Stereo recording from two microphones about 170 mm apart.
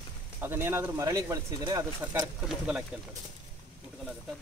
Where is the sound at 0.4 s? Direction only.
15° right (ahead or behind).